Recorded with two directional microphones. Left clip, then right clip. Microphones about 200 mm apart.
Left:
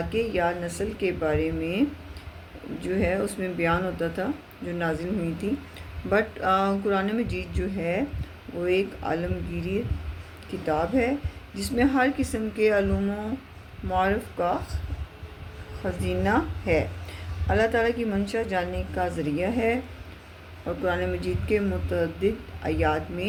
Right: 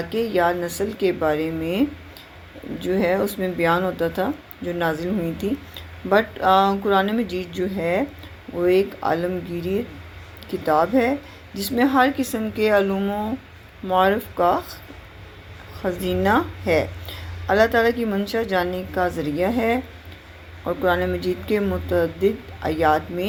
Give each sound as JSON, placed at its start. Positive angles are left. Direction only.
{"t": 0.1, "sound": "speech", "side_deg": -25}
{"t": 2.8, "sound": "speech", "side_deg": -25}
{"t": 16.2, "sound": "speech", "side_deg": -25}
{"t": 20.8, "sound": "speech", "side_deg": -25}